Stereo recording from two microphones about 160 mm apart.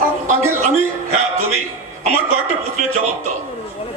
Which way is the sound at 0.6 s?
45° right (ahead or behind).